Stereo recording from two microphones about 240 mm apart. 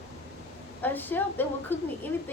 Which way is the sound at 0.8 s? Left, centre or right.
Centre.